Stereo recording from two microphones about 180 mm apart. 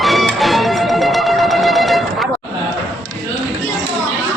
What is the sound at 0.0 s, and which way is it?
Music, centre (ahead or behind).